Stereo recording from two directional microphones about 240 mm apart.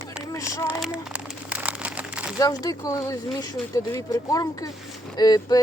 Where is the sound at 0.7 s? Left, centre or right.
Centre.